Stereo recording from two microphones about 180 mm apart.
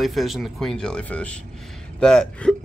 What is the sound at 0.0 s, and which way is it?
Speech, centre (ahead or behind).